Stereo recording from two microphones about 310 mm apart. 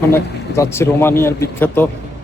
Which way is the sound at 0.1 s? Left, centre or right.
Centre.